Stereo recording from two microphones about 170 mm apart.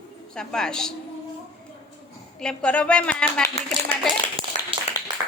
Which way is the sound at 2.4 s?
5° left (ahead or behind).